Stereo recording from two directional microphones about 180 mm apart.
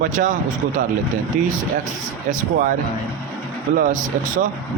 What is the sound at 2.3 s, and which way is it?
Speech, 45° right (ahead or behind).